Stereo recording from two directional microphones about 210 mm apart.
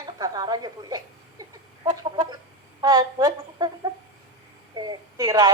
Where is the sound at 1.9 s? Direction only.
20° right (ahead or behind).